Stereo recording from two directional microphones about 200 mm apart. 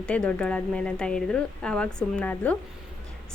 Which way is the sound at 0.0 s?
5° left (ahead or behind).